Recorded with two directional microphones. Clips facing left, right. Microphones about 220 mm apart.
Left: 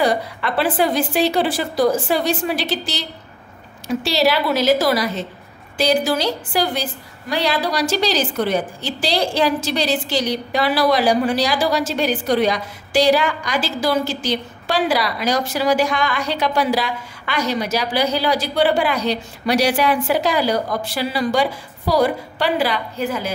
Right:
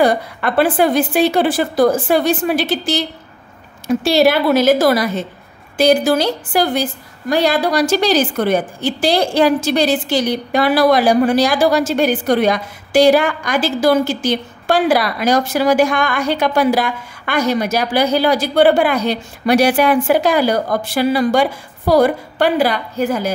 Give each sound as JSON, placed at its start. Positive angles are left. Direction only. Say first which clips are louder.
{"t": 0.0, "sound": "a woman's voice", "louder": "right 4 dB", "side_deg": -50}